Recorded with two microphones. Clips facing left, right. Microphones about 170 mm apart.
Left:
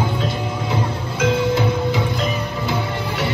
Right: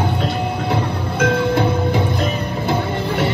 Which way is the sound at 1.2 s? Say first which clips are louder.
Right 1 dB; 55° right (ahead or behind).